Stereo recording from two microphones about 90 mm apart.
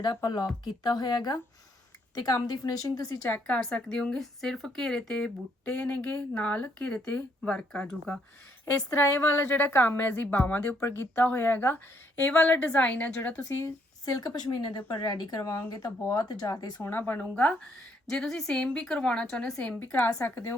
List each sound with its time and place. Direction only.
0.6 s a woman's voice: 50° left (ahead or behind)
3.2 s speech: 15° left (ahead or behind)
8.9 s a woman's voice: 35° left (ahead or behind); by 13.4 s 15° left (ahead or behind)
14.0 s a woman's voice: 45° left (ahead or behind)
16.8 s a woman's voice: 20° left (ahead or behind)
18.0 s a woman's voice: 5° left (ahead or behind); by 20.6 s 25° left (ahead or behind)